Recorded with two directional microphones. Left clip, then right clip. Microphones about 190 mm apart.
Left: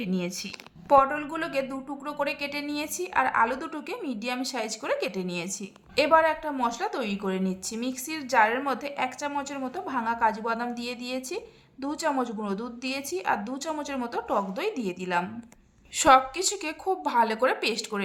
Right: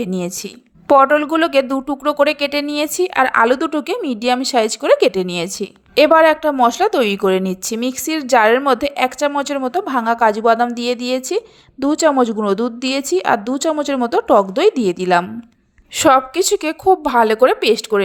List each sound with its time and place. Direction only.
0.9 s speech: 45° right (ahead or behind)